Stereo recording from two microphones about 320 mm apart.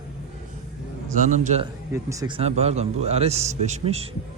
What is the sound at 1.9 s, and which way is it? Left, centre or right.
A man's voice, centre.